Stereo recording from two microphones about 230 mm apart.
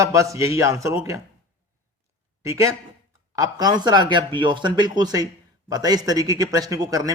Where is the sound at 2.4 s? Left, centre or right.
Centre.